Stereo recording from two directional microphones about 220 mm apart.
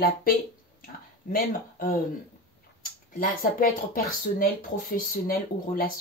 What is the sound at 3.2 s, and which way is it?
Speech, 40° left (ahead or behind).